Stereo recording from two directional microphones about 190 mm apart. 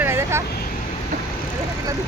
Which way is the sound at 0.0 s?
15° right (ahead or behind).